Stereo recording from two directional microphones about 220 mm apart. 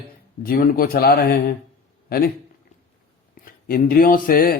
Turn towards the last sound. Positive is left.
turn(degrees=40)  # may be behind; listen again after turning